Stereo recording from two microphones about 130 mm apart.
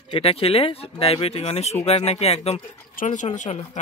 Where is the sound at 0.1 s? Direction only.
50° left (ahead or behind).